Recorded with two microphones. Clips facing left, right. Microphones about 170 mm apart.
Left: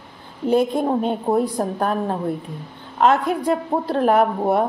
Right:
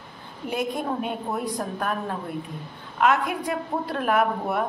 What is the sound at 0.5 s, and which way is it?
A woman's voice, 30° left (ahead or behind).